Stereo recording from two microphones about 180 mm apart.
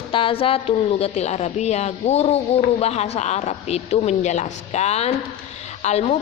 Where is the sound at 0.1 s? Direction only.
30° left (ahead or behind).